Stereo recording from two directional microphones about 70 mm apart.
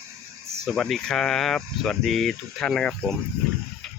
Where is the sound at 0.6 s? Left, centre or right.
Centre.